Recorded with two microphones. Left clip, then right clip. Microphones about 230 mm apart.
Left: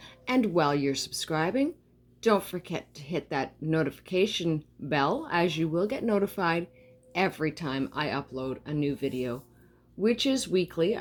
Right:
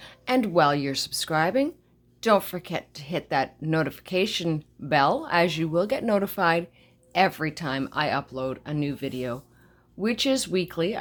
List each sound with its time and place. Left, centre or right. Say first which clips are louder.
0.0 s speech: right 3 dB; centre